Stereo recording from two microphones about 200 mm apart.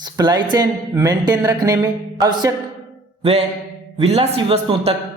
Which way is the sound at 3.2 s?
30° right (ahead or behind).